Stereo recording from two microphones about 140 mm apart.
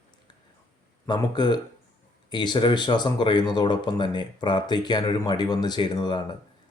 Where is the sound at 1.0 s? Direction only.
30° left (ahead or behind).